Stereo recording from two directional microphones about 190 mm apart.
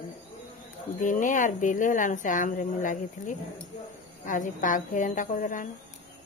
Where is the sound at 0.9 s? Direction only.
40° left (ahead or behind).